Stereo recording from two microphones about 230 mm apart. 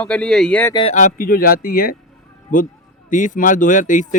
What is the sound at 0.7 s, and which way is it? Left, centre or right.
Speech, left.